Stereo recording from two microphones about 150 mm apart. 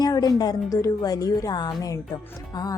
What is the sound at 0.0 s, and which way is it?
Speech, 25° left (ahead or behind).